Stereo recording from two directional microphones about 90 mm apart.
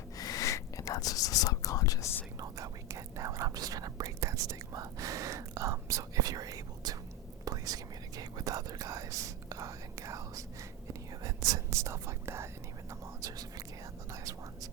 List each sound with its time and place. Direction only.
0.2 s whispering: 40° left (ahead or behind)
2.4 s whispering: 35° right (ahead or behind)
12.9 s whispering: 40° right (ahead or behind)